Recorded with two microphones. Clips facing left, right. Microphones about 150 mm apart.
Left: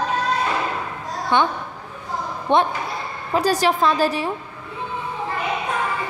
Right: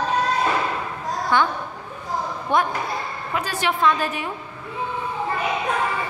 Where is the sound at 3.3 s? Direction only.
35° left (ahead or behind).